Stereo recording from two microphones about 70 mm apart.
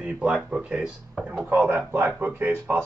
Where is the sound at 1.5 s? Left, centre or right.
Right.